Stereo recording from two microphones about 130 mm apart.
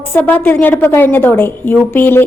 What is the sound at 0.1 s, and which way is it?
A woman's voice, 15° left (ahead or behind).